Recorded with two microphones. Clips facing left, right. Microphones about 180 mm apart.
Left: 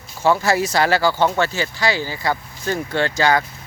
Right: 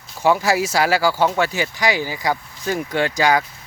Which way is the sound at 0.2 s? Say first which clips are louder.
Even; 10° right (ahead or behind).